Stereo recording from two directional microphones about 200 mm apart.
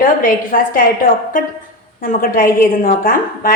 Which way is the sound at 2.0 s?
45° left (ahead or behind).